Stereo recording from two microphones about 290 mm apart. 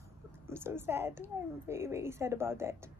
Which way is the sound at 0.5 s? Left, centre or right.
Centre.